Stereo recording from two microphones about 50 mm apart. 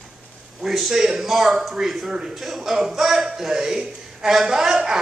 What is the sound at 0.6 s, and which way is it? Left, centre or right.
A man's voice, centre.